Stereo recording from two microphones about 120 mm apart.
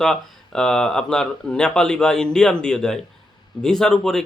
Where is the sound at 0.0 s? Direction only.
5° left (ahead or behind).